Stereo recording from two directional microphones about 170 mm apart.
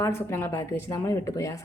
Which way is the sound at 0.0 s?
15° left (ahead or behind).